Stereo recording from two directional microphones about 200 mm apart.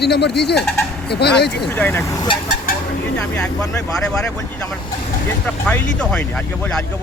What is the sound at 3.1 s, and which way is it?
Speech, 5° left (ahead or behind).